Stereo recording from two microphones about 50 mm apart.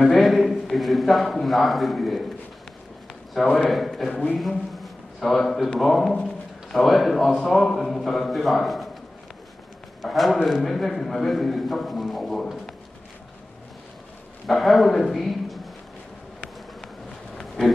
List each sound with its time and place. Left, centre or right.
0.0 s a man's voice: centre
3.3 s a man's voice: centre
4.1 s speech: left
4.4 s a man's voice: centre
10.0 s a man's voice: centre
14.4 s a man's voice: centre
17.4 s a sound: centre